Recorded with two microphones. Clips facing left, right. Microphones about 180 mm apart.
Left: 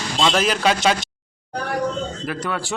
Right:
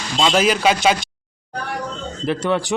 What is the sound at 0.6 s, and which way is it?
Speech, 15° right (ahead or behind).